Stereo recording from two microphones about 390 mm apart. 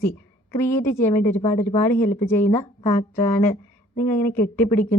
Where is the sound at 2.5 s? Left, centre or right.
Centre.